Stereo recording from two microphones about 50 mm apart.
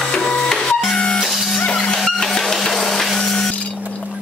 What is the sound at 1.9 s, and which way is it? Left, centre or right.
Printer, centre.